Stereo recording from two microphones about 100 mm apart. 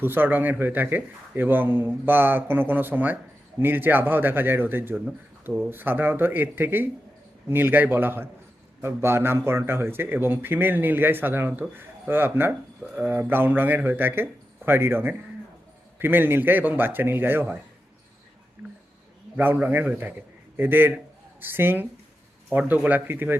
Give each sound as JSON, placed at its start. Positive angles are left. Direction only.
{"t": 0.0, "sound": "a man's voice", "side_deg": -20}
{"t": 19.4, "sound": "a man's voice", "side_deg": -20}